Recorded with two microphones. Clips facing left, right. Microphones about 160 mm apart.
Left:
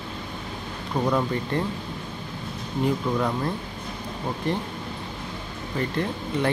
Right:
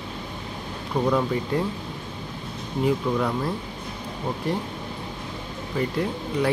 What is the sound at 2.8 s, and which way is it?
Speech, 5° right (ahead or behind).